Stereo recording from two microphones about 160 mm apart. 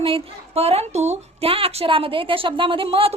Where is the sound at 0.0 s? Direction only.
35° right (ahead or behind).